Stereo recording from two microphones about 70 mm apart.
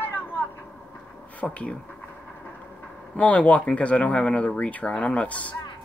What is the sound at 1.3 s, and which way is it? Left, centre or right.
Speech, centre.